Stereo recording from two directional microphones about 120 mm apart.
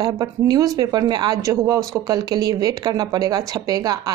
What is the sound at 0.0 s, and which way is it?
Speech, 35° right (ahead or behind).